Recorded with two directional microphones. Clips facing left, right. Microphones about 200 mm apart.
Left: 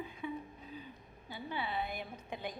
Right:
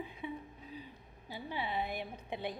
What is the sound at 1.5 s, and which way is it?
A woman's voice, 20° right (ahead or behind).